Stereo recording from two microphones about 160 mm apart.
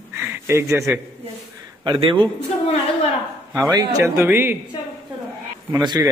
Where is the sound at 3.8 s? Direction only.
15° right (ahead or behind).